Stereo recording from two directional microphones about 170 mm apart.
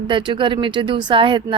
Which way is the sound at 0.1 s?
30° right (ahead or behind).